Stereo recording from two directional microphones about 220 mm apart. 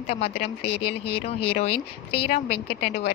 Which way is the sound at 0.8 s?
25° left (ahead or behind).